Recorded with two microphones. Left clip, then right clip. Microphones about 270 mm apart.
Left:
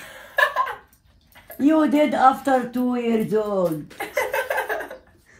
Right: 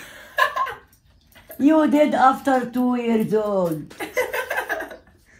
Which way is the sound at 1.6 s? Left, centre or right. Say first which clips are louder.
Right 2 dB; centre.